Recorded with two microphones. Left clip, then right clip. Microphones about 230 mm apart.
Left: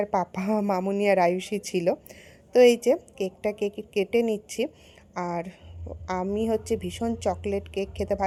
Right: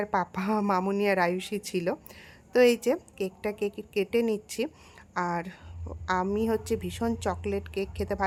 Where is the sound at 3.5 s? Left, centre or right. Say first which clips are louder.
Left 2 dB; right.